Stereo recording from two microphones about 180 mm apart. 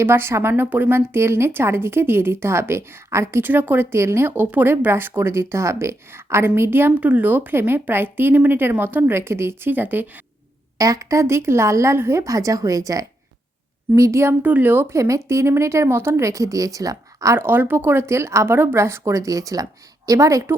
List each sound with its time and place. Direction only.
0.0 s a woman's voice: 15° right (ahead or behind)